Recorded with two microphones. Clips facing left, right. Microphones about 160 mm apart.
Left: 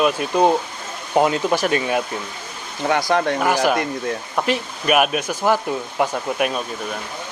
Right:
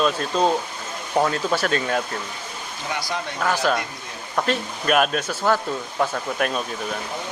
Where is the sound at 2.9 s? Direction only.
55° left (ahead or behind).